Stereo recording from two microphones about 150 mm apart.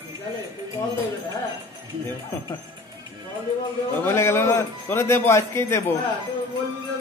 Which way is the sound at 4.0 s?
15° left (ahead or behind).